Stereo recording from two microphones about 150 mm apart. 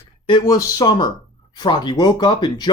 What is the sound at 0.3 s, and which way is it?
Speech, 30° left (ahead or behind).